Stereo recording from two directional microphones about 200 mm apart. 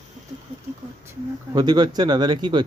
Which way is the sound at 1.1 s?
20° right (ahead or behind).